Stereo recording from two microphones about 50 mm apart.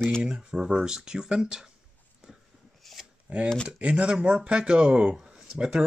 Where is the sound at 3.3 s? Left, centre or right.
Right.